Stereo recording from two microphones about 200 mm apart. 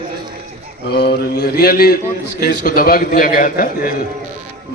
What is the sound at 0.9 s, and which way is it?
A man's voice, 55° left (ahead or behind).